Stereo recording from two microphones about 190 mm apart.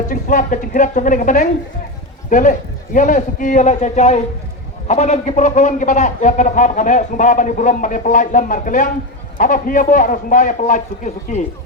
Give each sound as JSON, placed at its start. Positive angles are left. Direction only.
{"t": 0.1, "sound": "a man's voice", "side_deg": 45}